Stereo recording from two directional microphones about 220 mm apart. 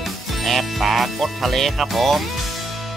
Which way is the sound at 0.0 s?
Centre (ahead or behind).